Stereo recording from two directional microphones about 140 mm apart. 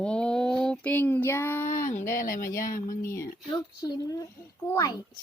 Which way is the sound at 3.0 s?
20° left (ahead or behind).